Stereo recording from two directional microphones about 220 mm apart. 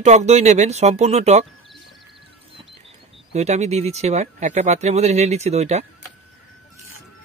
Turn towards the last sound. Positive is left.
turn(degrees=-30)  # may be behind; listen again after turning